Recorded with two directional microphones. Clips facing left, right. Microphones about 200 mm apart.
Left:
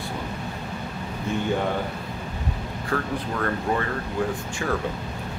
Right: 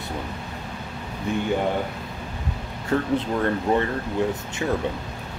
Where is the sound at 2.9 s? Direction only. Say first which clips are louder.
Right 5 dB; 25° right (ahead or behind).